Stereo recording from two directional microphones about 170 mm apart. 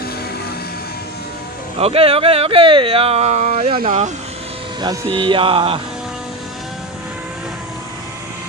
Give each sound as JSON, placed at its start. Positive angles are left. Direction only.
{"t": 1.8, "sound": "speech", "side_deg": -35}
{"t": 5.1, "sound": "speech", "side_deg": -30}